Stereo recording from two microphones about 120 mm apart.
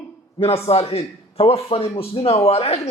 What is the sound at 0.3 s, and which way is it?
A man's voice, 55° left (ahead or behind).